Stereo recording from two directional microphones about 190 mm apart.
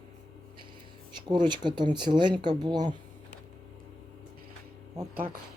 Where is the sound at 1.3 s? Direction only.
25° right (ahead or behind).